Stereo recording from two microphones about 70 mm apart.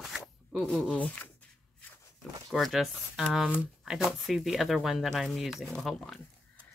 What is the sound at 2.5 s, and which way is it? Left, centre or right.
Speech, centre.